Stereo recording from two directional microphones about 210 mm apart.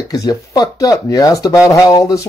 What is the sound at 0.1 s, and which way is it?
Speech, 15° left (ahead or behind).